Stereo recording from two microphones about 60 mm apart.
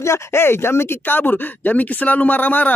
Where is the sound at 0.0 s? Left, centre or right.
Left.